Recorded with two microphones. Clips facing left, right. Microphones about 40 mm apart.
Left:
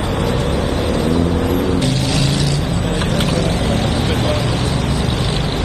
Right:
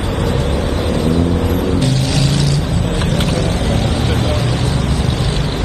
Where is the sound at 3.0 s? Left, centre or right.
Centre.